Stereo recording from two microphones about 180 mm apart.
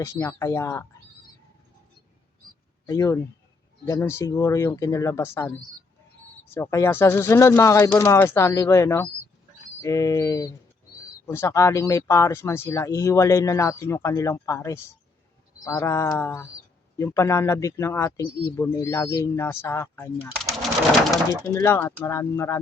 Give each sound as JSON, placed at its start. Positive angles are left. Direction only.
{"t": 0.0, "sound": "speech", "side_deg": 15}
{"t": 2.8, "sound": "speech", "side_deg": 15}
{"t": 20.4, "sound": "a sound", "side_deg": 0}
{"t": 21.5, "sound": "speech", "side_deg": 15}